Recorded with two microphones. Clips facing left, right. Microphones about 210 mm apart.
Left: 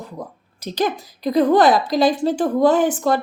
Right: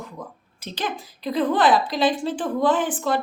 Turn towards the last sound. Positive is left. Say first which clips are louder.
# left 6 dB
turn(degrees=40)  # may be behind; listen again after turning